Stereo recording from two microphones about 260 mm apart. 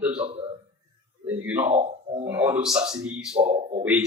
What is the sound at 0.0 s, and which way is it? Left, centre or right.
Speech, centre.